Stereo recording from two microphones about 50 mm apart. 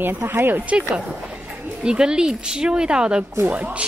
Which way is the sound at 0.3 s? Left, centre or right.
Right.